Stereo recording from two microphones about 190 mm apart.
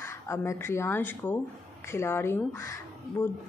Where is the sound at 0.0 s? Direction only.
15° left (ahead or behind).